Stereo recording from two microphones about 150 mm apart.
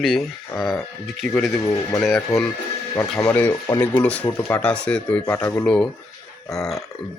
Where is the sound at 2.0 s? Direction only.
Centre (ahead or behind); by 5.6 s 15° left (ahead or behind).